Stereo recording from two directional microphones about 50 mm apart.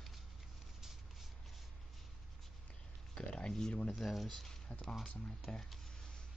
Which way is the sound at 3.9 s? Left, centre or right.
Centre.